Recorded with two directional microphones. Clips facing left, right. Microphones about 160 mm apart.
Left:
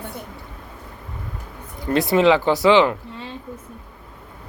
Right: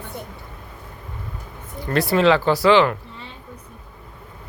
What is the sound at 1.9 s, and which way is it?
Speech, 20° left (ahead or behind).